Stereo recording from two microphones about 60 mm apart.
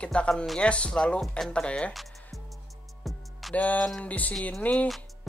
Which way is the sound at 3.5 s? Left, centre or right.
Left.